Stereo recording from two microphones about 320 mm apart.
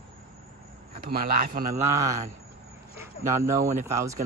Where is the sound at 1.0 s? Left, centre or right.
Right.